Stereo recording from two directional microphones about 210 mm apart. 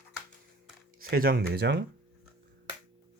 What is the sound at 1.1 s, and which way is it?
Speech, 45° right (ahead or behind).